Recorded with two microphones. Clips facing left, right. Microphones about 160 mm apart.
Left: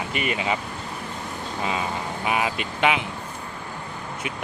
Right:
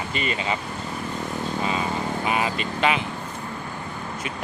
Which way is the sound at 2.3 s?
10° left (ahead or behind).